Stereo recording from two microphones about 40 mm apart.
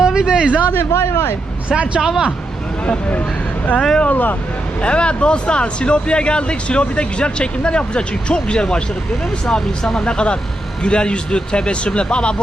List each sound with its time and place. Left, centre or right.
0.0 s speech: centre
0.7 s speech: left
2.0 s speech: centre
2.8 s speech: left
3.8 s speech: centre
4.1 s speech: left
4.8 s speech: left